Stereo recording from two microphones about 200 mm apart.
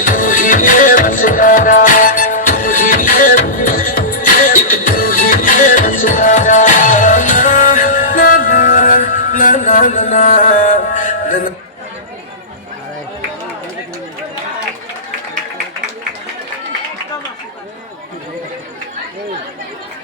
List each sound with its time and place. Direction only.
0.0 s music: 45° left (ahead or behind)